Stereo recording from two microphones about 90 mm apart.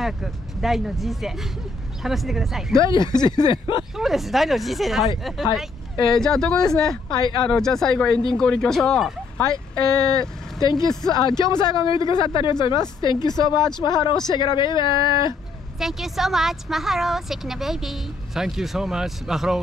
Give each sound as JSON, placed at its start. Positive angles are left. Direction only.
{"t": 0.0, "sound": "a woman's voice", "side_deg": 0}
{"t": 2.8, "sound": "a man's voice", "side_deg": 55}
{"t": 3.9, "sound": "a woman's voice", "side_deg": -5}
{"t": 6.1, "sound": "speech", "side_deg": 5}
{"t": 7.1, "sound": "a man's voice", "side_deg": 60}
{"t": 7.4, "sound": "speech", "side_deg": 5}
{"t": 9.4, "sound": "a man's voice", "side_deg": 50}
{"t": 15.8, "sound": "a woman's voice", "side_deg": -5}